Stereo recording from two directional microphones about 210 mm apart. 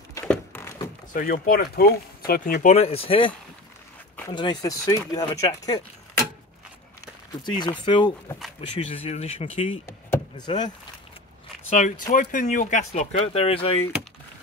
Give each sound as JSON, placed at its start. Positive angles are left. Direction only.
{"t": 0.2, "sound": "a sound", "side_deg": 5}
{"t": 1.1, "sound": "speech", "side_deg": 40}
{"t": 7.4, "sound": "speech", "side_deg": 20}
{"t": 9.8, "sound": "power windows", "side_deg": 20}
{"t": 12.1, "sound": "speech", "side_deg": 40}